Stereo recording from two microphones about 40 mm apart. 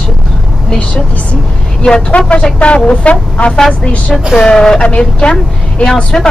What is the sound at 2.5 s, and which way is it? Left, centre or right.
Speech, left.